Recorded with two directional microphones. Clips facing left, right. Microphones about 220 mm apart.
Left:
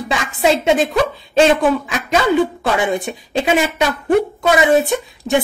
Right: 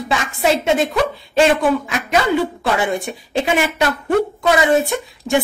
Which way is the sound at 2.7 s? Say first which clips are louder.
Left 2 dB; 20° left (ahead or behind).